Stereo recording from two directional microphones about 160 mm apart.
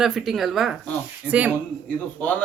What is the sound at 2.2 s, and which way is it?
Speech, 10° left (ahead or behind).